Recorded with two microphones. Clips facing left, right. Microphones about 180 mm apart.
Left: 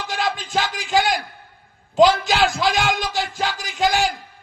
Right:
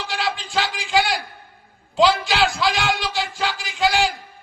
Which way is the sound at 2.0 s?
45° left (ahead or behind).